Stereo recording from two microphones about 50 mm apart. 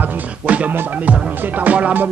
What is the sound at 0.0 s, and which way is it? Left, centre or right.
Music, right.